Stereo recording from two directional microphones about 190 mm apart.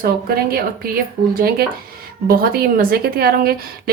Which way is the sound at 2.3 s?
50° right (ahead or behind).